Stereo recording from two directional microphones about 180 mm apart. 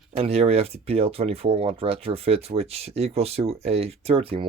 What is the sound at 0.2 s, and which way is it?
Speech, 35° right (ahead or behind).